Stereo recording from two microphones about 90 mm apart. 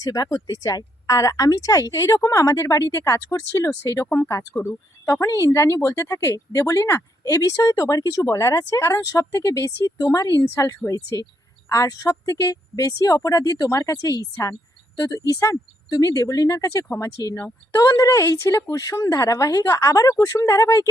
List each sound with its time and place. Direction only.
0.0 s a woman's voice: 45° left (ahead or behind)